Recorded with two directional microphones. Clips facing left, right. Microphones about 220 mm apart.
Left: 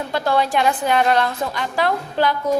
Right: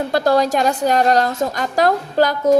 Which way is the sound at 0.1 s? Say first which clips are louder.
Right 4 dB; 40° right (ahead or behind).